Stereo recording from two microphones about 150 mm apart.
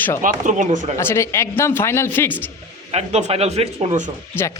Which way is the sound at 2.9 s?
45° right (ahead or behind).